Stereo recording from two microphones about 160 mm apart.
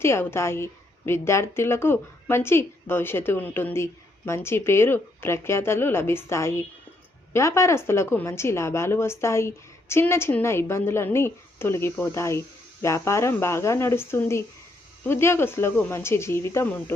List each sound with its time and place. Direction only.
0.0 s a woman's voice: 15° left (ahead or behind)